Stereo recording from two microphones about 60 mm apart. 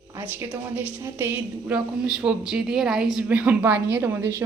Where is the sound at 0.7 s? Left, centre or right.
Right.